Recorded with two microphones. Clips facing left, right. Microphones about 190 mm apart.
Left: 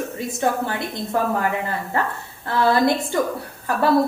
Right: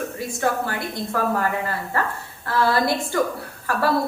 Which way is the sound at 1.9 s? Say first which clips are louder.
Left 1 dB; 20° left (ahead or behind).